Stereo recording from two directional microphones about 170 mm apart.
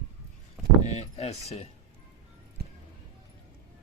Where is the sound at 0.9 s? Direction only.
40° left (ahead or behind).